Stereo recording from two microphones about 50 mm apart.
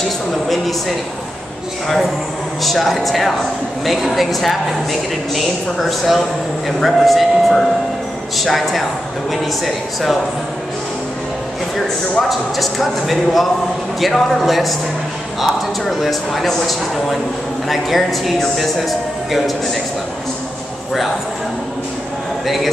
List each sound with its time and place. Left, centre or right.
0.5 s speech: centre
2.6 s speech: centre
12.3 s speech: centre